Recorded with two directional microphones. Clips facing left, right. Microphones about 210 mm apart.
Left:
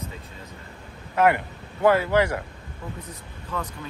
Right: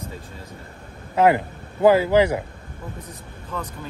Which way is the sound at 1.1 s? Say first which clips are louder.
Right 3 dB; 25° right (ahead or behind).